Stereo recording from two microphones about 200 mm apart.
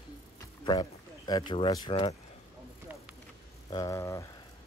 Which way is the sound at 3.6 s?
20° left (ahead or behind).